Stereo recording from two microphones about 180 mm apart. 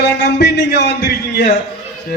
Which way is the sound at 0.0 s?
75° left (ahead or behind).